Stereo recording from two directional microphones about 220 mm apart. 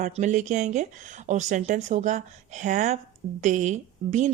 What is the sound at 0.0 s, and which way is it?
A woman's voice, 35° right (ahead or behind).